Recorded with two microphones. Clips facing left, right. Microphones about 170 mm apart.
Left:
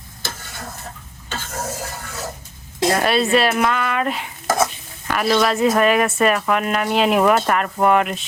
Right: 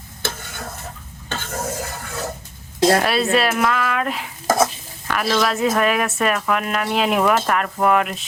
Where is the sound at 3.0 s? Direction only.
Centre (ahead or behind).